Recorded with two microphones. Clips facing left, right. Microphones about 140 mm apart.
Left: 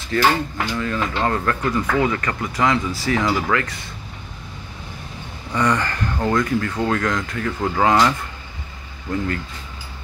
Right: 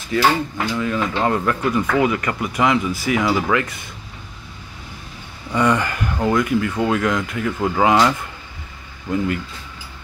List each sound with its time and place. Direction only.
0.1 s speech: 10° right (ahead or behind)
5.5 s speech: 15° right (ahead or behind)